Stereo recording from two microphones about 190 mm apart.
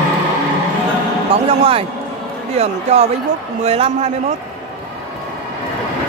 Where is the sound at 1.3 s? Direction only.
30° right (ahead or behind).